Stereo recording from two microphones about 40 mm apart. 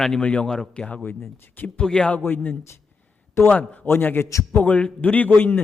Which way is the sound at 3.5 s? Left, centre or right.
Left.